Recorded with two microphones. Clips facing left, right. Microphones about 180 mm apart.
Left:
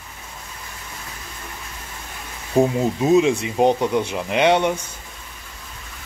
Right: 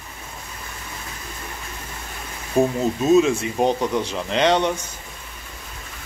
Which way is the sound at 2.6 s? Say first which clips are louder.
Left 1 dB; 15° left (ahead or behind).